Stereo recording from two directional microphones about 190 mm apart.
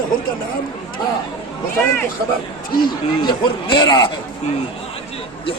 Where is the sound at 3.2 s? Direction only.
25° left (ahead or behind).